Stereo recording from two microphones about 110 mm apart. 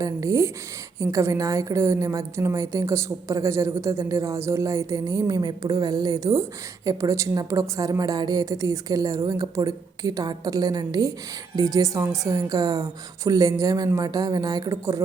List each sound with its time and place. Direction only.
0.0 s a woman's voice: 30° right (ahead or behind)